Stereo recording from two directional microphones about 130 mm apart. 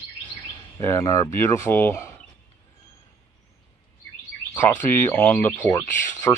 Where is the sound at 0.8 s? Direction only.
25° left (ahead or behind).